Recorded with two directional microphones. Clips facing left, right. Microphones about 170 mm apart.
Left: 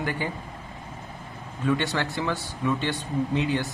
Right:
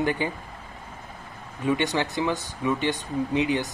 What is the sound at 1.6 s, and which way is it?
Speech, 15° right (ahead or behind).